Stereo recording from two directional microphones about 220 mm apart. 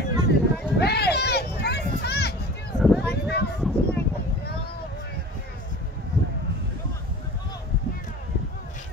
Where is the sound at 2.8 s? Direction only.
Centre (ahead or behind).